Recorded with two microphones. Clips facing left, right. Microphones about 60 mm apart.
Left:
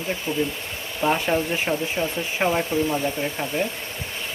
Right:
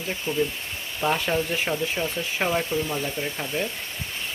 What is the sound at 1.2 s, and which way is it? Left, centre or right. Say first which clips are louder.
Speech: left 2 dB; left.